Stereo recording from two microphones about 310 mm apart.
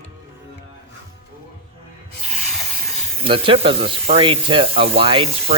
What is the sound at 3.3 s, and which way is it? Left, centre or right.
Speech, centre.